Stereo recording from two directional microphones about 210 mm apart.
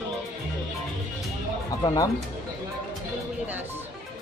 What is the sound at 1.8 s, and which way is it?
Speech, 20° left (ahead or behind).